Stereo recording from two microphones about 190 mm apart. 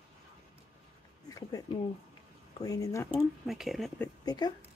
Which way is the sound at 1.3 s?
20° left (ahead or behind).